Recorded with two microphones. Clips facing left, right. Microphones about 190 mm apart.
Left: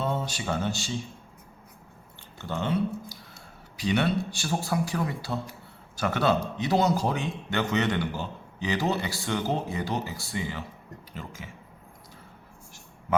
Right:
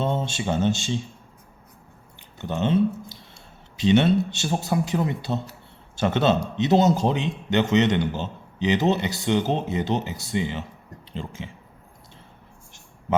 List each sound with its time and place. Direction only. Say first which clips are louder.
0.0 s speech: right 4 dB; 25° right (ahead or behind)
2.4 s a man's voice: right 6 dB; 20° right (ahead or behind)